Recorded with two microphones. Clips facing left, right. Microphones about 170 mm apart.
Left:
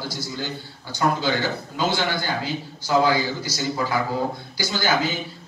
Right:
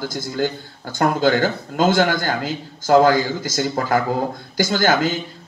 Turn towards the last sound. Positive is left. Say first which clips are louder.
# right 6 dB
turn(degrees=-50)  # may be behind; listen again after turning